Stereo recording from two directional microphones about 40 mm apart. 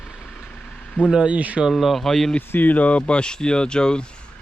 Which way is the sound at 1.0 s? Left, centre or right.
Right.